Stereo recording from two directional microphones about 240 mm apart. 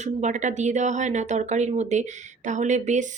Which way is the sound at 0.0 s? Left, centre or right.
Right.